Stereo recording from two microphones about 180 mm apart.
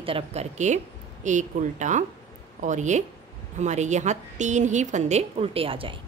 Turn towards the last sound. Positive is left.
turn(degrees=-30)  # may be behind; listen again after turning